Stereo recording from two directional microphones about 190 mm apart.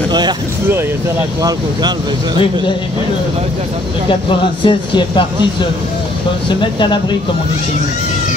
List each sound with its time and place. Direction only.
1.4 s speech: 20° right (ahead or behind)
4.6 s speech: 25° left (ahead or behind)